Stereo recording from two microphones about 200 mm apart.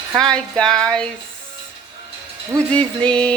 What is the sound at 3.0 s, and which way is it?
Speech, 5° left (ahead or behind).